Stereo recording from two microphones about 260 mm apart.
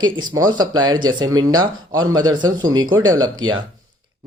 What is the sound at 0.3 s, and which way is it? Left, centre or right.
Speech, centre.